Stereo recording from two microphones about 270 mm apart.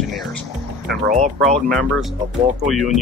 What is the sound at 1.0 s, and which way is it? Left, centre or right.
Speech, right.